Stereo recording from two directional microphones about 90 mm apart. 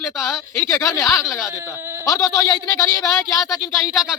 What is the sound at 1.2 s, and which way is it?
Speech, 5° right (ahead or behind).